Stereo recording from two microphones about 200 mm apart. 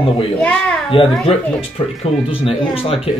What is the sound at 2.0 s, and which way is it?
Speech, 30° left (ahead or behind).